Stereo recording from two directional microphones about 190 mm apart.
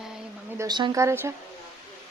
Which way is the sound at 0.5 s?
20° right (ahead or behind).